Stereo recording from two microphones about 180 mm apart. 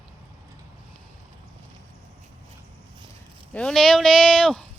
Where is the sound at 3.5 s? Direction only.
5° left (ahead or behind).